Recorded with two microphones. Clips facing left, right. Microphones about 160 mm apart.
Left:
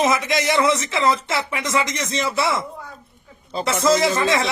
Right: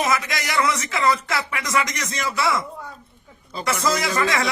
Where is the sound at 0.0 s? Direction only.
25° left (ahead or behind).